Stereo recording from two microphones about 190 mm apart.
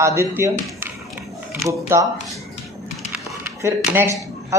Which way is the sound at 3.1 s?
10° right (ahead or behind).